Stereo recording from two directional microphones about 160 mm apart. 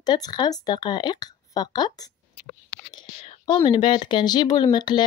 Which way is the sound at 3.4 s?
30° left (ahead or behind).